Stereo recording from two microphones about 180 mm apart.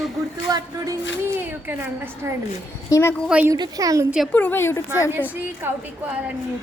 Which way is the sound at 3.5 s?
20° right (ahead or behind).